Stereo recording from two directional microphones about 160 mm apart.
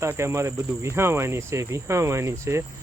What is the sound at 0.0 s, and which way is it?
Speech, 15° right (ahead or behind).